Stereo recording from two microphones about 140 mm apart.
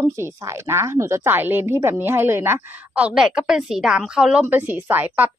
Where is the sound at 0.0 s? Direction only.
25° right (ahead or behind).